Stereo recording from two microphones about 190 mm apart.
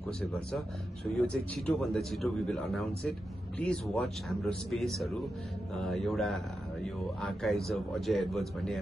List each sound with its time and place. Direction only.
0.3 s speech: 5° left (ahead or behind)